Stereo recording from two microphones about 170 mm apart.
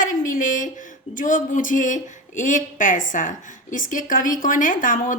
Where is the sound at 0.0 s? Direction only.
50° left (ahead or behind).